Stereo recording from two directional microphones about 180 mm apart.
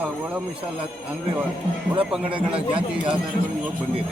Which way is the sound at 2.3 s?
30° right (ahead or behind).